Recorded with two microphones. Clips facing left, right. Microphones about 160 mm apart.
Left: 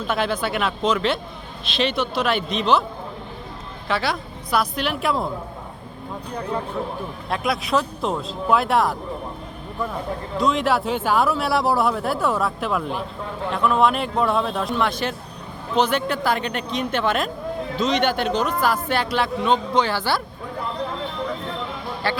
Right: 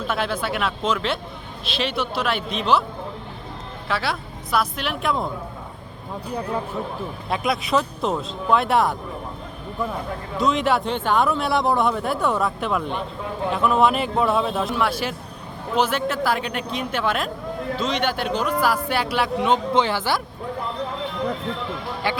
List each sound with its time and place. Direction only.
0.1 s a man's voice: centre (ahead or behind)
3.8 s a man's voice: centre (ahead or behind)
7.3 s a man's voice: centre (ahead or behind)
10.3 s a man's voice: centre (ahead or behind); by 20.2 s 15° right (ahead or behind)
22.0 s speech: 15° right (ahead or behind)